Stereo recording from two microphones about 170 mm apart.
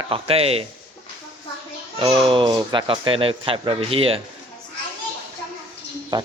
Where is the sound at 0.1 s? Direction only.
35° right (ahead or behind).